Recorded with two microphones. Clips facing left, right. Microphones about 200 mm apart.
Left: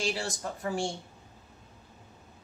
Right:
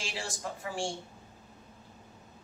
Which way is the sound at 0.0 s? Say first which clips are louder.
Left 6 dB; 40° left (ahead or behind).